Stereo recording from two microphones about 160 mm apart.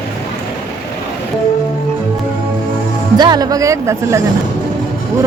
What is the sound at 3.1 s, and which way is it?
Speech, 25° right (ahead or behind).